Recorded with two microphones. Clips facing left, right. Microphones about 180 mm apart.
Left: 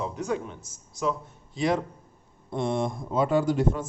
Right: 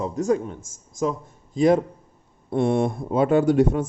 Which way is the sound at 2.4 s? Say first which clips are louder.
Right 6 dB; 60° right (ahead or behind).